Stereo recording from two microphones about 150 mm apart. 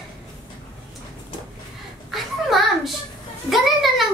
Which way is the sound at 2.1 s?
Centre (ahead or behind).